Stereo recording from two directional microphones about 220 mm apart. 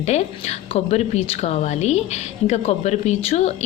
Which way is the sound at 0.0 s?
30° left (ahead or behind).